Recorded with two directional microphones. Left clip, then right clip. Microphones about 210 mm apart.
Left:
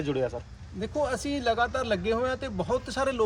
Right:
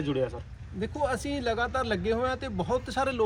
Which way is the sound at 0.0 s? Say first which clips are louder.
Even; 25° left (ahead or behind).